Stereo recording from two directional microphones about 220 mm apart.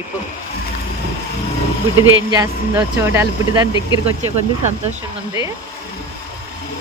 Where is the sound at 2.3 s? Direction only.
15° right (ahead or behind).